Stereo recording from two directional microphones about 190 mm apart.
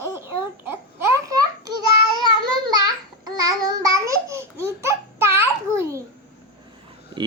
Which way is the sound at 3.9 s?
15° right (ahead or behind).